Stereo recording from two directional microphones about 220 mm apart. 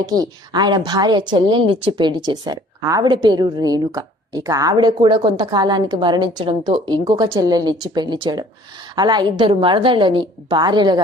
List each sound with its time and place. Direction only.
0.0 s a woman's voice: 15° right (ahead or behind)